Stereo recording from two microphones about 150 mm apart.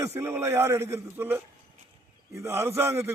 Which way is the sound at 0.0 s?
15° right (ahead or behind).